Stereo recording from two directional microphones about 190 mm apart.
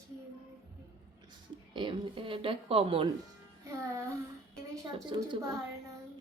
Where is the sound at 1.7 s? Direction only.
25° right (ahead or behind).